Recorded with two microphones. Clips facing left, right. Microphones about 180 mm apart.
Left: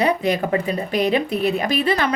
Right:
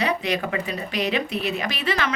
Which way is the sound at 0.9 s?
50° left (ahead or behind).